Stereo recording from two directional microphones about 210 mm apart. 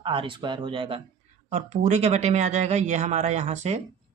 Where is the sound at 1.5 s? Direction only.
35° right (ahead or behind).